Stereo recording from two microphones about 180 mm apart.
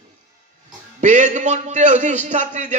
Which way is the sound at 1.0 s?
40° right (ahead or behind).